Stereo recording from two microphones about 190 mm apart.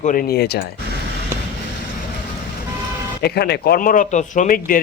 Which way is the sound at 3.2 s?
55° left (ahead or behind).